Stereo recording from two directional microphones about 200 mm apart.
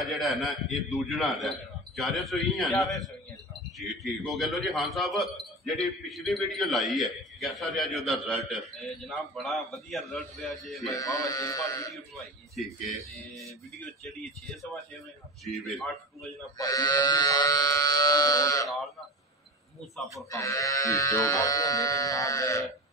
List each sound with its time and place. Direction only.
0.0 s a man's voice: centre (ahead or behind)
9.4 s a man's voice: centre (ahead or behind)
10.9 s speech: 15° left (ahead or behind)
12.5 s a man's voice: centre (ahead or behind)
14.0 s a man's voice: centre (ahead or behind)
16.5 s speech: 20° left (ahead or behind)
20.2 s speech: 15° left (ahead or behind)